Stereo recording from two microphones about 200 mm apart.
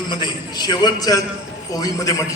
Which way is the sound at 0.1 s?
20° left (ahead or behind).